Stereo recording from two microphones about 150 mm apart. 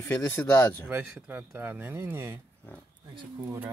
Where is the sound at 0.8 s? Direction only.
10° right (ahead or behind).